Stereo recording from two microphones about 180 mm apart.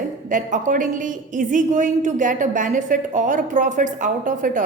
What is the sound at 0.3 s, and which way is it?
A woman's voice, 45° right (ahead or behind).